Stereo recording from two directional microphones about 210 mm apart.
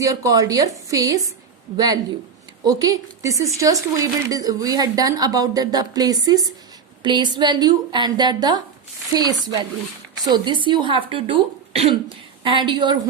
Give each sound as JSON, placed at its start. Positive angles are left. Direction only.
{"t": 0.0, "sound": "speech", "side_deg": -15}